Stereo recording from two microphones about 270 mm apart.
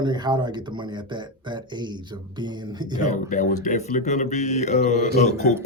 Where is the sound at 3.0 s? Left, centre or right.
Left.